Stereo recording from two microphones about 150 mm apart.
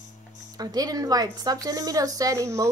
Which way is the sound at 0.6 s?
25° right (ahead or behind).